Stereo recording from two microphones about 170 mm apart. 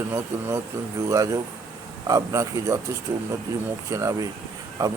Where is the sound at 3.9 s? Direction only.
20° right (ahead or behind).